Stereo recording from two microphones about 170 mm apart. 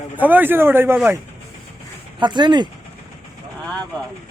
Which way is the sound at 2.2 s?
25° right (ahead or behind).